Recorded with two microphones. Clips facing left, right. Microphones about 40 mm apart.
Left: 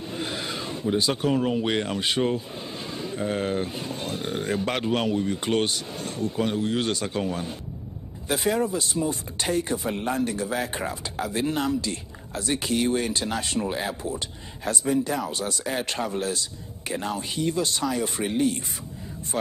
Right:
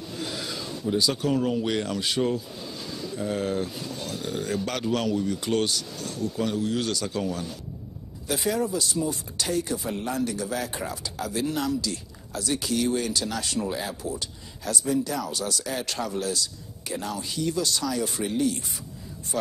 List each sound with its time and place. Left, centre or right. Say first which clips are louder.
0.1 s speech: left 2 dB; left